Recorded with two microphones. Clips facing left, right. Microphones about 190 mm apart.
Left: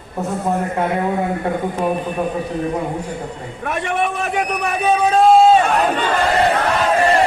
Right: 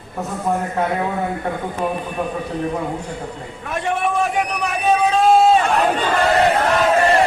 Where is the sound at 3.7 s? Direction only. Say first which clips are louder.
Even; 65° left (ahead or behind).